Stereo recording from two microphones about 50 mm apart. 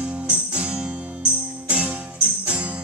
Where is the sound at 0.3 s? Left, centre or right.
Right.